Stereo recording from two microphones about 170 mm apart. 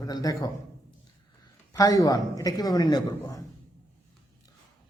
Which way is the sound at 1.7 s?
20° left (ahead or behind).